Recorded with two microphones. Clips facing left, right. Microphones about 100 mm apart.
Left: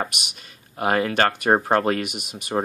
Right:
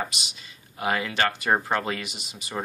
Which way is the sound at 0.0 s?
55° left (ahead or behind).